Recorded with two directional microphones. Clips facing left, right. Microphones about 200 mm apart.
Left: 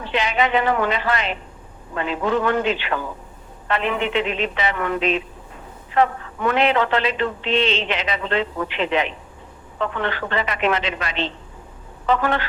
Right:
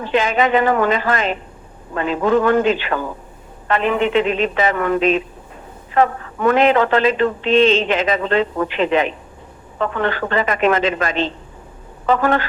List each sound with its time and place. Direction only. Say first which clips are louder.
0.0 s speech: right 5 dB; 45° right (ahead or behind)